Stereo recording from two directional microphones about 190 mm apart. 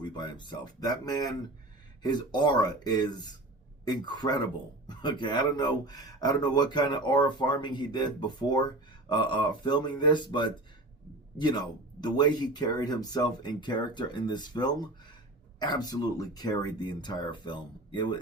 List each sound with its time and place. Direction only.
0.0 s speech: 25° left (ahead or behind)